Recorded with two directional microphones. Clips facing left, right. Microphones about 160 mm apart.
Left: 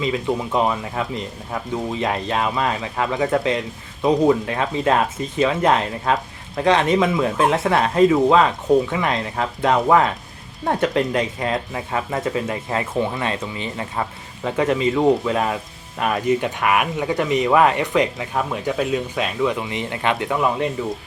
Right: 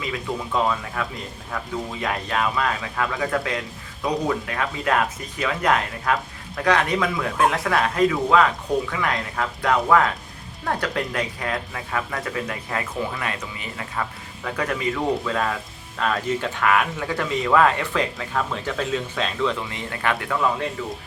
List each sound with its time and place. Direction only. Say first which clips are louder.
0.0 s speech: left 6 dB; 20° left (ahead or behind)